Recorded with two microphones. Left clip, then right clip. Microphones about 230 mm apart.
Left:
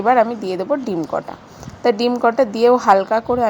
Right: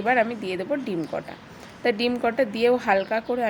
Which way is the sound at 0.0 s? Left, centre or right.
Centre.